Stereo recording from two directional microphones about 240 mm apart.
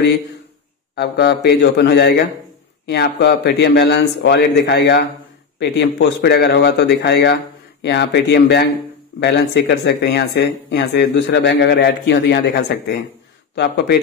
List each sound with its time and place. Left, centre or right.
0.9 s speech: left